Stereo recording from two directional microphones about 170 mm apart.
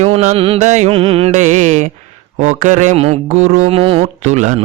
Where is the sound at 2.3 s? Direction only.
45° right (ahead or behind).